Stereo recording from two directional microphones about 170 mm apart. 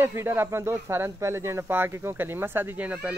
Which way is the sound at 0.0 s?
15° right (ahead or behind).